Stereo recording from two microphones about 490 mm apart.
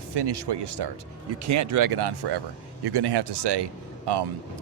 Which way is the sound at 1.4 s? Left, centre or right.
Right.